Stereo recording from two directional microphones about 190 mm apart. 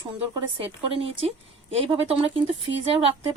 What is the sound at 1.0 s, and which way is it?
A woman's voice, 30° right (ahead or behind).